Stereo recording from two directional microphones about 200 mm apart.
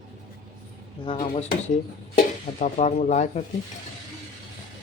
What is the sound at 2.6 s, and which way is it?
Speech, 35° left (ahead or behind).